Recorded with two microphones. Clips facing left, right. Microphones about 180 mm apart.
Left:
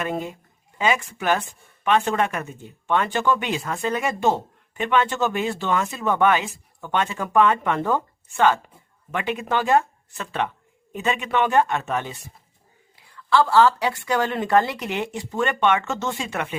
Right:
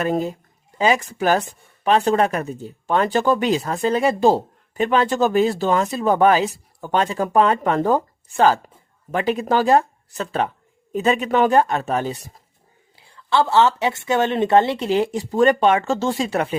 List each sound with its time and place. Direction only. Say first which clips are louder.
0.0 s speech: right 6 dB; 35° right (ahead or behind)
13.0 s speech: even; 25° right (ahead or behind)